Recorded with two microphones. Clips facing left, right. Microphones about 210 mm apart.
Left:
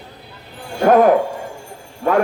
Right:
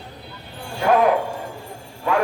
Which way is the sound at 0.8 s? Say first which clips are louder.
Left 5 dB; 45° left (ahead or behind).